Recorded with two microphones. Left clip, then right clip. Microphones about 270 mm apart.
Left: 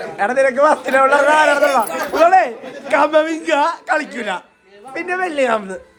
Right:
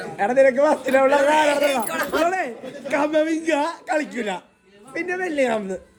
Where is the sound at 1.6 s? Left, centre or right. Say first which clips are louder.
Left 6 dB; centre.